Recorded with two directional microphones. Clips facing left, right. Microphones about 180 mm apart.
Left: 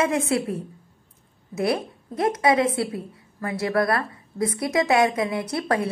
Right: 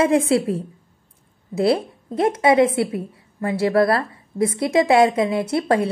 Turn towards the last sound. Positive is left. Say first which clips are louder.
# right 5 dB
turn(degrees=-25)  # may be behind; listen again after turning